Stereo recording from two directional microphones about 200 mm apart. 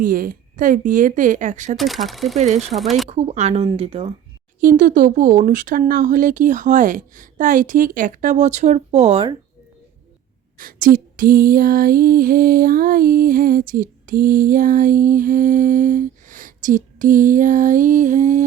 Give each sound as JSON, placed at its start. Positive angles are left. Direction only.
{"t": 0.0, "sound": "speech", "side_deg": -45}
{"t": 1.7, "sound": "speech", "side_deg": 0}
{"t": 3.1, "sound": "speech", "side_deg": -30}
{"t": 4.6, "sound": "speech", "side_deg": -40}
{"t": 10.6, "sound": "female singing", "side_deg": -45}